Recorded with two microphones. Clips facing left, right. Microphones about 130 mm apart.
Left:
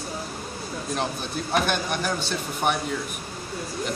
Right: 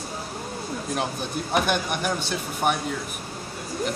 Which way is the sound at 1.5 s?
10° right (ahead or behind).